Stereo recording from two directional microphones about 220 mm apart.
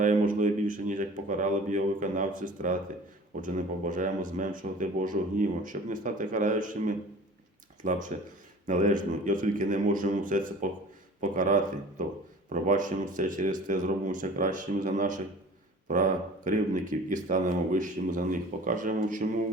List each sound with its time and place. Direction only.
0.0 s speech: 35° right (ahead or behind)